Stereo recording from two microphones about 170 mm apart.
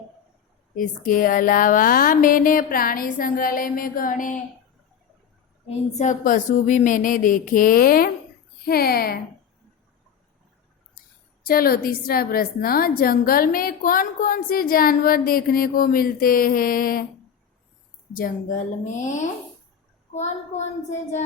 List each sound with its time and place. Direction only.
0.8 s a woman's voice: 55° left (ahead or behind)
5.6 s a woman's voice: 45° left (ahead or behind); by 9.2 s 65° left (ahead or behind)
11.4 s a woman's voice: 60° left (ahead or behind)
18.1 s speech: 50° left (ahead or behind)